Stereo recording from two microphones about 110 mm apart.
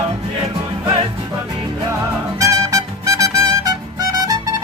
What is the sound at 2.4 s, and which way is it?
Music, 30° right (ahead or behind).